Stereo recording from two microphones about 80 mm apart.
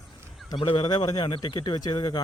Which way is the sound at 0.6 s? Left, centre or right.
Left.